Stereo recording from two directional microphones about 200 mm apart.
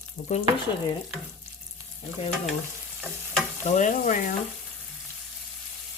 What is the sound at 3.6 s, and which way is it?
Frying, 35° left (ahead or behind).